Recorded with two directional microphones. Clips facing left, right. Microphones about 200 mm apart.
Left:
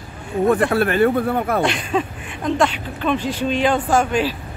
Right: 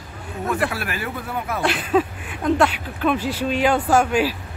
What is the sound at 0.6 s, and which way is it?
Speech, 55° left (ahead or behind).